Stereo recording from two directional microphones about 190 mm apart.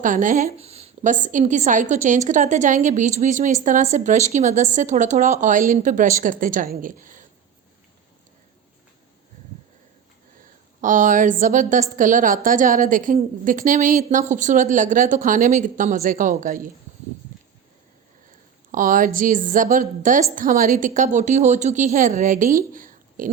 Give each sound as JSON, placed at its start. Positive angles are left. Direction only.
{"t": 0.0, "sound": "a woman's voice", "side_deg": -45}
{"t": 10.8, "sound": "a woman's voice", "side_deg": -45}
{"t": 18.7, "sound": "a woman's voice", "side_deg": -45}